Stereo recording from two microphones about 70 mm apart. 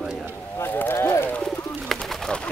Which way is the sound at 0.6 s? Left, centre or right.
Left.